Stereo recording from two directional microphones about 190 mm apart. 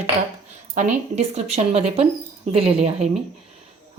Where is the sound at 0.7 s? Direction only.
40° right (ahead or behind).